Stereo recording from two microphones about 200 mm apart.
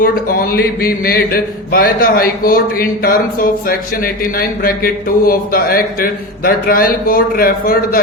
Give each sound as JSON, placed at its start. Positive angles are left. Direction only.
{"t": 0.0, "sound": "speech", "side_deg": 45}